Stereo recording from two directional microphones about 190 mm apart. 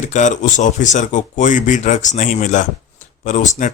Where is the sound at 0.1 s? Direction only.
40° left (ahead or behind).